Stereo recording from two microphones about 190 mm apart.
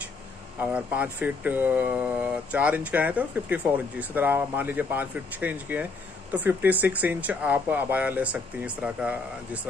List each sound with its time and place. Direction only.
0.6 s speech: 5° right (ahead or behind)